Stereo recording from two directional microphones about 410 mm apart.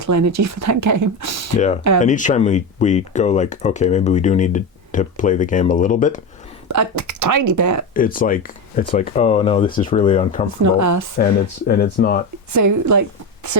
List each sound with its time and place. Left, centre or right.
0.1 s speech: right
2.0 s speech: centre
6.7 s speech: right
7.9 s speech: centre
10.6 s speech: right
11.7 s speech: left
12.5 s a woman's voice: right